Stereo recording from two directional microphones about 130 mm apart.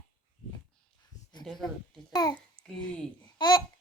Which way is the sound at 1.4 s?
5° left (ahead or behind).